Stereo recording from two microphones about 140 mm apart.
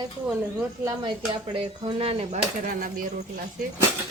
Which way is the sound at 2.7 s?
75° right (ahead or behind).